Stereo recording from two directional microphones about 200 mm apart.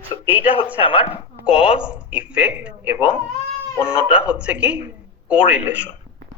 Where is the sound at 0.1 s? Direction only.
20° left (ahead or behind).